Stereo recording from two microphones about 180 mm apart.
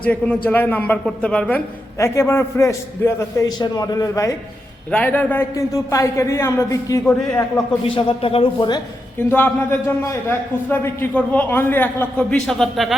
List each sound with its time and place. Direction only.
0.0 s a man's voice: 10° left (ahead or behind)
7.0 s a man's voice: 5° left (ahead or behind)
7.9 s speech: 30° left (ahead or behind)
9.1 s a man's voice: 10° left (ahead or behind)